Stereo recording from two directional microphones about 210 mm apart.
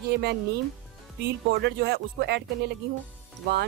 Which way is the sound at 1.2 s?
55° right (ahead or behind).